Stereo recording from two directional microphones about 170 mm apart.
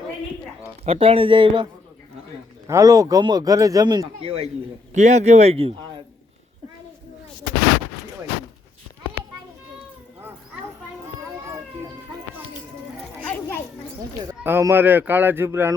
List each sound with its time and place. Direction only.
0.9 s speech: 35° right (ahead or behind)
2.6 s speech: 20° right (ahead or behind)
4.9 s speech: 40° right (ahead or behind)
13.2 s children playing: 10° left (ahead or behind)
14.4 s speech: 15° right (ahead or behind)